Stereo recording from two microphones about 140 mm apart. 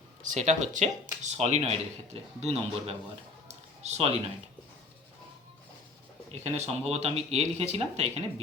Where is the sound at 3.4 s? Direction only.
50° right (ahead or behind).